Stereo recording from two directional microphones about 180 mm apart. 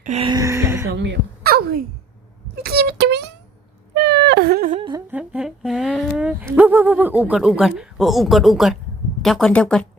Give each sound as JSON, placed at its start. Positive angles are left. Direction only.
{"t": 0.0, "sound": "music", "side_deg": -40}
{"t": 0.3, "sound": "music", "side_deg": -20}
{"t": 0.9, "sound": "speech", "side_deg": -75}
{"t": 2.6, "sound": "a sound", "side_deg": -65}
{"t": 5.1, "sound": "speech", "side_deg": -5}